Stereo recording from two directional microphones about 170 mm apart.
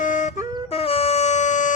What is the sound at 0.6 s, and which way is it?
Wind instrument, 35° left (ahead or behind).